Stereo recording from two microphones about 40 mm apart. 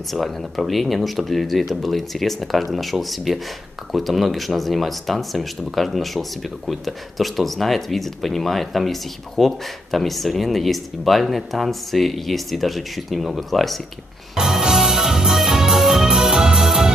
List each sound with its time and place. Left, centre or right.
0.1 s speech: centre
14.3 s music: centre